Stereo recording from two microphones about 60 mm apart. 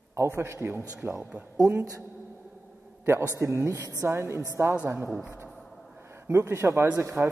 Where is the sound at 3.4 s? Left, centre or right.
Right.